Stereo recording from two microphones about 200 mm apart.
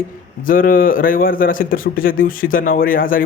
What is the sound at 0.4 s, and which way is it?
Speech, 45° left (ahead or behind).